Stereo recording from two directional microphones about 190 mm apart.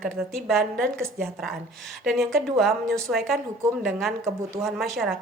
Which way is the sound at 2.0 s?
Centre (ahead or behind).